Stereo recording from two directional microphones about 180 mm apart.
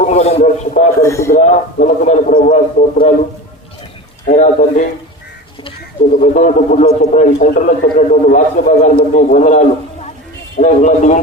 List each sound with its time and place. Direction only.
0.0 s a man's voice: 40° left (ahead or behind)
1.0 s speech: 15° left (ahead or behind)
1.3 s speech: 40° left (ahead or behind)
4.3 s speech: 45° left (ahead or behind)
6.3 s a man's voice: 45° left (ahead or behind)